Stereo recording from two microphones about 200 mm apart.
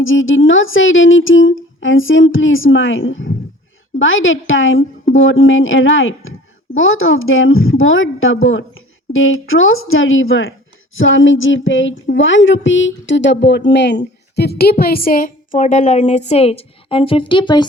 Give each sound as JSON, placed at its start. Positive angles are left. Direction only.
{"t": 0.0, "sound": "a woman's voice", "side_deg": 75}